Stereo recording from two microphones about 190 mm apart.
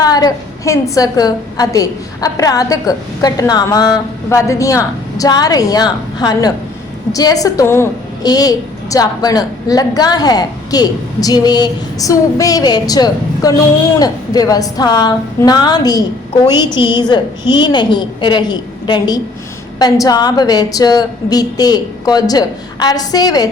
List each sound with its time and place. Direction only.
0.0 s a woman's voice: 20° left (ahead or behind)